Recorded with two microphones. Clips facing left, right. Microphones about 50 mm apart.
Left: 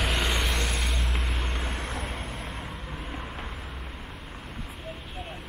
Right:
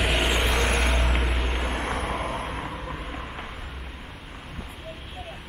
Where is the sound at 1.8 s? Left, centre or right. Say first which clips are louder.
Right 6 dB; right.